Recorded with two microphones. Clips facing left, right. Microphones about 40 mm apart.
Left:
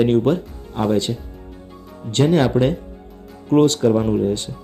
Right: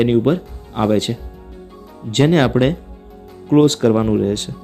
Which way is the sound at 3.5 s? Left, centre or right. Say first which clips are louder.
Right 2 dB; right.